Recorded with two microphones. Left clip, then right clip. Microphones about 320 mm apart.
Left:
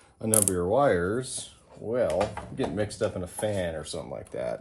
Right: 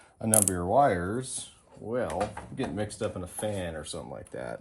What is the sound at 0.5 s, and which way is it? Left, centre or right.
Speech, right.